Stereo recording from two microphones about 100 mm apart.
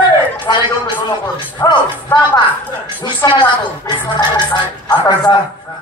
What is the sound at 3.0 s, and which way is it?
A woman's voice, 50° left (ahead or behind).